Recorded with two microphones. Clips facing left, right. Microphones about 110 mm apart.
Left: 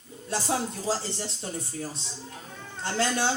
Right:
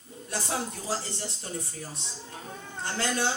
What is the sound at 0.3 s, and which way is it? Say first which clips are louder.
Speech: left 4 dB; 30° left (ahead or behind).